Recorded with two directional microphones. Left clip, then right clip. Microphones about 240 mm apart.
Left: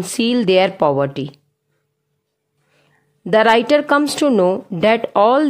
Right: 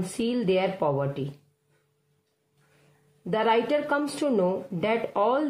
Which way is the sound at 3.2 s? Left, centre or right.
Left.